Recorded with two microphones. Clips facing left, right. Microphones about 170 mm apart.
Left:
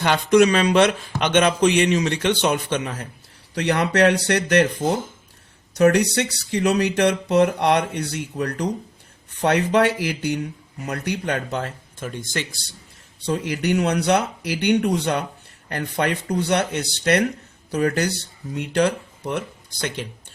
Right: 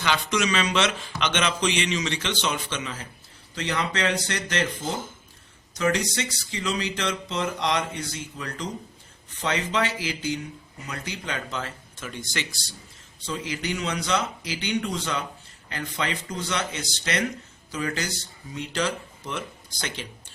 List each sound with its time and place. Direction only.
0.0 s speech: 55° left (ahead or behind)